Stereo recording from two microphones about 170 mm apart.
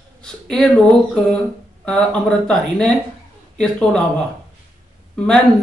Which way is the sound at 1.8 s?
5° left (ahead or behind).